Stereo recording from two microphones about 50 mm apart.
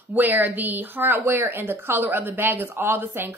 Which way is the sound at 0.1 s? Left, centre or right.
Right.